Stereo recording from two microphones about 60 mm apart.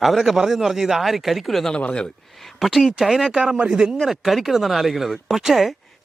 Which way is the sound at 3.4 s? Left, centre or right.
Right.